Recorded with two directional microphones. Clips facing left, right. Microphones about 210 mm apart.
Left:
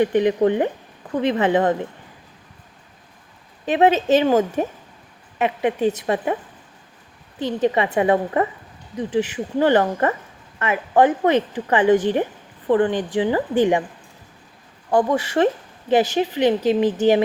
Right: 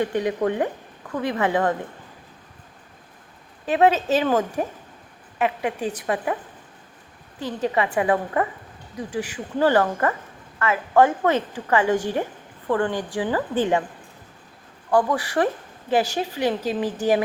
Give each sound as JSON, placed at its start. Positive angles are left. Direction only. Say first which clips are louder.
{"t": 0.0, "sound": "a woman's voice", "louder": "left 6 dB", "side_deg": 20}
{"t": 3.7, "sound": "a woman's voice", "louder": "left 3 dB", "side_deg": 20}
{"t": 7.3, "sound": "a woman's voice", "louder": "left 4 dB", "side_deg": 20}
{"t": 14.8, "sound": "a woman's voice", "louder": "left 2 dB", "side_deg": 20}